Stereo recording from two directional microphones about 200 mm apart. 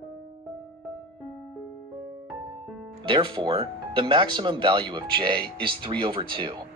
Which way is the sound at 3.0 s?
25° right (ahead or behind).